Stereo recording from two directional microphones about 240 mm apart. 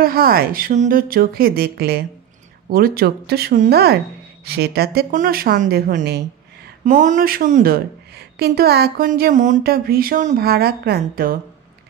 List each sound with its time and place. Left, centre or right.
0.0 s speech: right